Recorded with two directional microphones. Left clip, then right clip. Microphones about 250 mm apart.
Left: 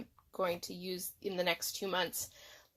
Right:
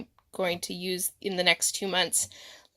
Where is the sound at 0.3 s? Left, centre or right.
Right.